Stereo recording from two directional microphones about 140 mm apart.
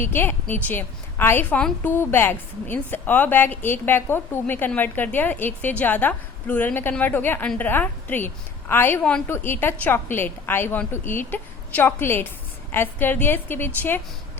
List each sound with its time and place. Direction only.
0.0 s a woman's voice: 15° left (ahead or behind)